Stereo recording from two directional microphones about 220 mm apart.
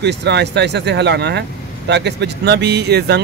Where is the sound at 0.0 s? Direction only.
50° right (ahead or behind).